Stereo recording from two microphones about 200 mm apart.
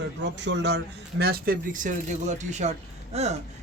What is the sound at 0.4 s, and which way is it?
Speech, 60° right (ahead or behind).